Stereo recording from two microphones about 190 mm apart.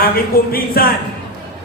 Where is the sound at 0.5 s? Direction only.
50° left (ahead or behind).